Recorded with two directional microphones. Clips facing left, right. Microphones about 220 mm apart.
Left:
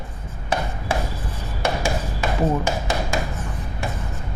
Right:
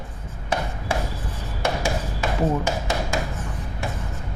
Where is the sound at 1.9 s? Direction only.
20° left (ahead or behind).